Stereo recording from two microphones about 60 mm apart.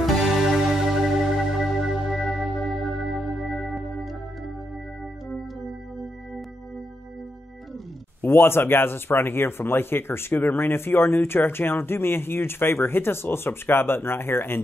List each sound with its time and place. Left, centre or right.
0.0 s music: centre
8.3 s speech: left